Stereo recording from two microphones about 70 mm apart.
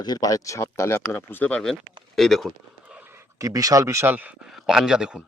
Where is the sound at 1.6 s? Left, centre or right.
Centre.